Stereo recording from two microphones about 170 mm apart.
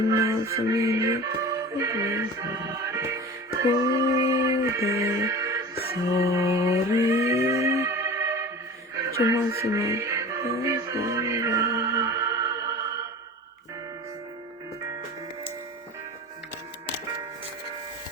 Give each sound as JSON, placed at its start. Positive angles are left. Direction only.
{"t": 0.2, "sound": "music", "side_deg": -20}